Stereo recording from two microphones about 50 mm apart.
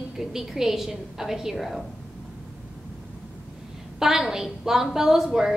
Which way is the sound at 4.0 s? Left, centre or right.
Centre.